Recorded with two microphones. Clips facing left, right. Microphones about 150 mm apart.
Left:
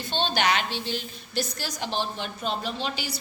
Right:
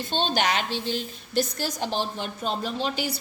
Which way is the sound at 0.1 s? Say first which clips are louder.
Even; 45° right (ahead or behind).